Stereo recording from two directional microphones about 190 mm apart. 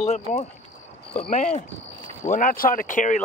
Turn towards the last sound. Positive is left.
turn(degrees=40)  # may be behind; listen again after turning